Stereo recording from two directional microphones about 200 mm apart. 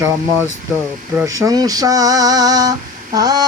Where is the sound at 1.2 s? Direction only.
15° right (ahead or behind).